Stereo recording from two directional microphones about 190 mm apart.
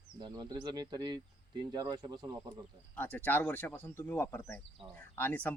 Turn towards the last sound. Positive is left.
turn(degrees=10)  # may be behind; listen again after turning